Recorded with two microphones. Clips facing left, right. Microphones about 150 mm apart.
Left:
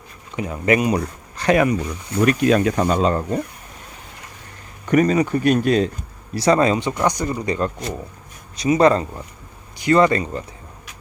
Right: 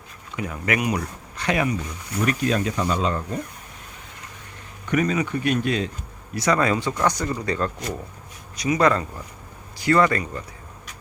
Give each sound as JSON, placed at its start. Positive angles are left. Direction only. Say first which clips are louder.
{"t": 0.3, "sound": "speech", "louder": "left 6 dB", "side_deg": 25}
{"t": 2.2, "sound": "speech", "louder": "left 7 dB", "side_deg": 70}
{"t": 4.9, "sound": "speech", "louder": "left 6 dB", "side_deg": 40}
{"t": 6.3, "sound": "speech", "louder": "left 5 dB", "side_deg": 30}